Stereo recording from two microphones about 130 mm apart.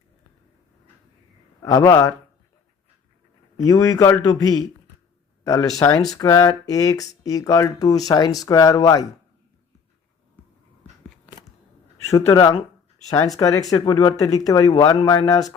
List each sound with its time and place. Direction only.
1.6 s speech: 25° left (ahead or behind)
3.7 s speech: 25° left (ahead or behind)
12.1 s speech: 25° left (ahead or behind)